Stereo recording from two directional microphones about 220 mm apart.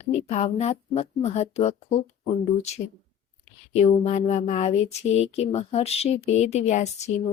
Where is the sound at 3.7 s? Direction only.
30° left (ahead or behind).